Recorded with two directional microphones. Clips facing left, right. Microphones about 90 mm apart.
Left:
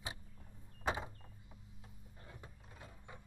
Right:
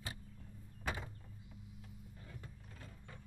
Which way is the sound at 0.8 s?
25° left (ahead or behind).